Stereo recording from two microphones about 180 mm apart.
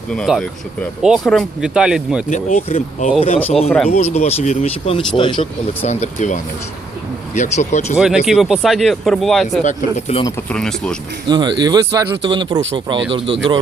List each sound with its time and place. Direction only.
0.1 s speech: centre (ahead or behind)
2.3 s speech: 40° left (ahead or behind)
3.4 s speech: centre (ahead or behind)
3.8 s speech: 45° left (ahead or behind)
7.9 s speech: 5° right (ahead or behind)
9.6 s speech: 35° left (ahead or behind)
10.5 s speech: 5° left (ahead or behind)
11.3 s speech: 25° right (ahead or behind)